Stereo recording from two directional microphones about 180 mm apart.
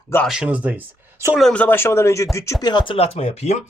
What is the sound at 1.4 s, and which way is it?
Speech, 5° left (ahead or behind).